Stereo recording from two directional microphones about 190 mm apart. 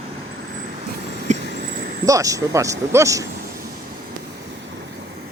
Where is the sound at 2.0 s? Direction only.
15° right (ahead or behind).